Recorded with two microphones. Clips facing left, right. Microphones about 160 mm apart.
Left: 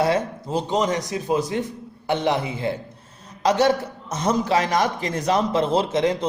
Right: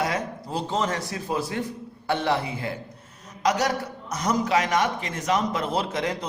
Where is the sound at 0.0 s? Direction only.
25° left (ahead or behind).